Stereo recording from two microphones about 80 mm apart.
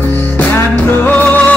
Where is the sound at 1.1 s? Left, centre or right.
Centre.